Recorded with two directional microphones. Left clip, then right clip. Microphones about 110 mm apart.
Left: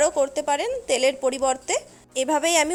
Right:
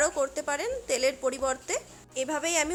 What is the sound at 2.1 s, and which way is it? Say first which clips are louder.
Speech: left 8 dB; 55° left (ahead or behind).